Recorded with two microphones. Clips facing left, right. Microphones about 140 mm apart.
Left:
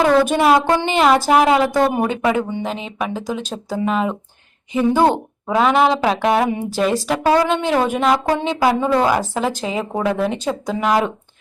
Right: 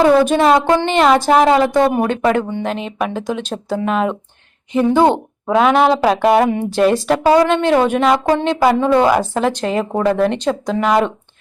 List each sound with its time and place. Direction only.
0.0 s a woman's voice: 10° right (ahead or behind)
0.3 s a woman's voice: 5° left (ahead or behind)